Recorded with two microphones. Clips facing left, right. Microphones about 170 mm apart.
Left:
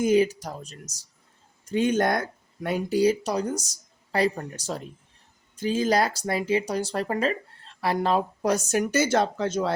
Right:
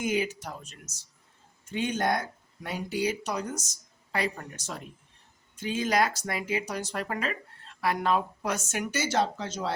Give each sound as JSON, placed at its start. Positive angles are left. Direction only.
{"t": 0.0, "sound": "speech", "side_deg": 35}
{"t": 2.9, "sound": "speech", "side_deg": 35}